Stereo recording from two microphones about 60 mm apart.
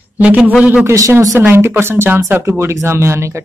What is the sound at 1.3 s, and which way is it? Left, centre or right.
Speech, right.